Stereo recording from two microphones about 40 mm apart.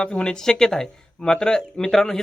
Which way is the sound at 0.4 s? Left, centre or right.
Centre.